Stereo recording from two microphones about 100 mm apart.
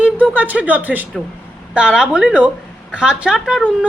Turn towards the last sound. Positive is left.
turn(degrees=-5)  # may be behind; listen again after turning